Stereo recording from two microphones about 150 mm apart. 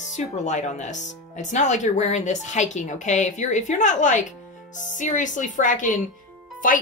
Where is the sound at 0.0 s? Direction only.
50° left (ahead or behind).